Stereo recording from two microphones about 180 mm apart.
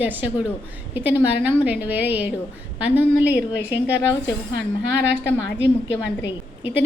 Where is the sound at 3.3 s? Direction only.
75° left (ahead or behind).